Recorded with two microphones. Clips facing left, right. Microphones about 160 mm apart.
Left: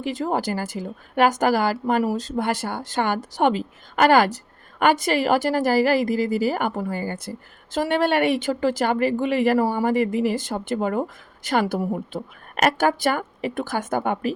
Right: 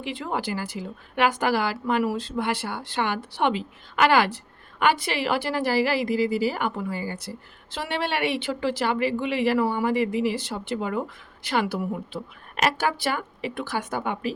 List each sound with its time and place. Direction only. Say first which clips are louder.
0.0 s a woman's voice: left 5 dB; 40° left (ahead or behind)